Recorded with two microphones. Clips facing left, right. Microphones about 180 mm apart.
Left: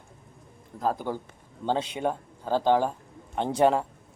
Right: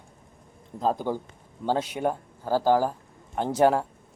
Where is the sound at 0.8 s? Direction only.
20° right (ahead or behind).